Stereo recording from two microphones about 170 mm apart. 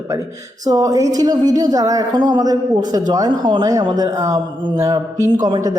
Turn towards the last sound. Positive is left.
turn(degrees=-20)  # may be behind; listen again after turning